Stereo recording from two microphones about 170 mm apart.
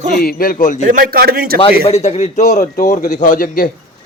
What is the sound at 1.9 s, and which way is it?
A man's voice, 40° left (ahead or behind).